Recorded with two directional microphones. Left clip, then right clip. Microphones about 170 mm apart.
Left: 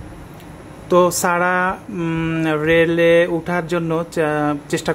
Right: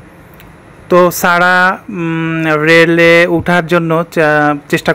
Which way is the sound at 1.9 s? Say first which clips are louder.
Right 6 dB; 25° right (ahead or behind).